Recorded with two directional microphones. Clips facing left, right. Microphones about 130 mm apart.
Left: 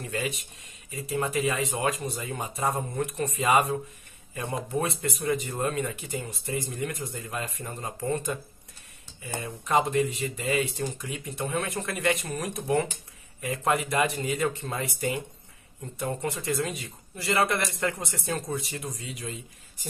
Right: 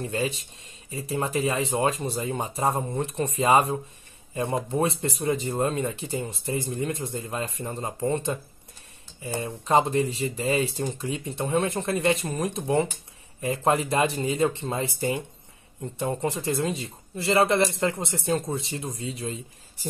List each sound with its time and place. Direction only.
0.0 s speech: 30° right (ahead or behind)